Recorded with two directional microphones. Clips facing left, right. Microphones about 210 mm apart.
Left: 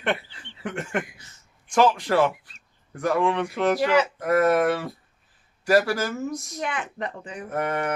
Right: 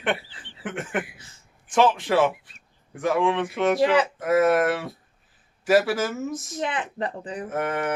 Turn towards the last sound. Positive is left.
turn(degrees=0)  # may be behind; listen again after turning